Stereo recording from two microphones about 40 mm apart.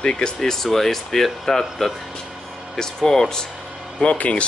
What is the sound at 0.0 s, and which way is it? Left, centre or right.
Speech, left.